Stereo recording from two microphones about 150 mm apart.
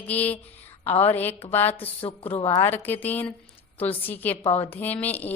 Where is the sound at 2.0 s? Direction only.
40° left (ahead or behind).